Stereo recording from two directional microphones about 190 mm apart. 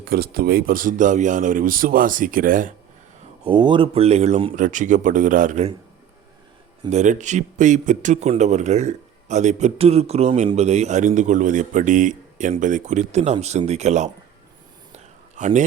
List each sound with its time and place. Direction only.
0.0 s speech: 50° right (ahead or behind)
3.4 s speech: 25° right (ahead or behind)
4.5 s speech: 40° right (ahead or behind)
6.9 s speech: 40° right (ahead or behind)
14.9 s a sound: 40° right (ahead or behind)